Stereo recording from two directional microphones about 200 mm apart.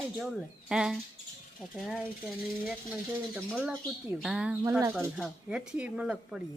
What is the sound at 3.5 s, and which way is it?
Speech, centre (ahead or behind).